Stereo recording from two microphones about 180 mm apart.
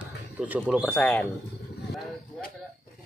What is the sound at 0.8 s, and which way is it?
Speech, 5° left (ahead or behind).